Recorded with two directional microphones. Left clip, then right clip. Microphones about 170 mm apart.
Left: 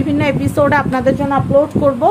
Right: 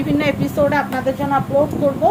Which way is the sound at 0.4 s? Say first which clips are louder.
Left 4 dB; 50° left (ahead or behind).